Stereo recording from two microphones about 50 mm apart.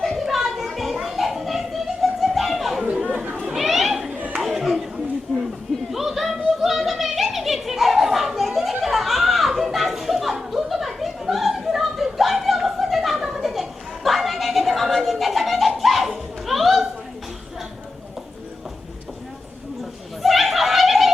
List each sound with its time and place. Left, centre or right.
0.0 s children playing: centre
3.2 s children playing: right
3.4 s a sound: centre
20.2 s snicker: centre